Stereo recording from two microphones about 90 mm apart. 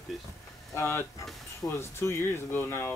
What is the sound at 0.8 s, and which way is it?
Speech, 25° left (ahead or behind).